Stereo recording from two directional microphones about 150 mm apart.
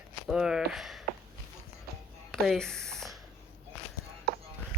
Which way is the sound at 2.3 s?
5° left (ahead or behind).